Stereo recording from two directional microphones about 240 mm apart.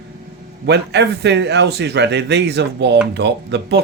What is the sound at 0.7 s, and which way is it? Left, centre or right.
A man's voice, right.